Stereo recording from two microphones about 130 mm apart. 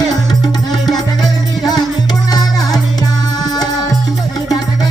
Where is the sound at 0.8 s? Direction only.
30° left (ahead or behind).